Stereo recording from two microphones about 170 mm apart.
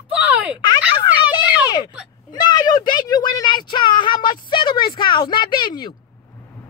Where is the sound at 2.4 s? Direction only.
25° left (ahead or behind).